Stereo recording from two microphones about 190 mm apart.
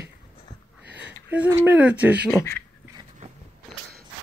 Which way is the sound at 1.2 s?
10° right (ahead or behind).